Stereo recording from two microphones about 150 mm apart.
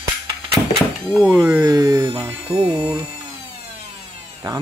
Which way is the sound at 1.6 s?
25° right (ahead or behind).